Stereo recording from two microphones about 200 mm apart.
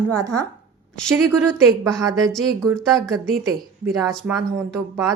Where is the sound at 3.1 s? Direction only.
15° right (ahead or behind).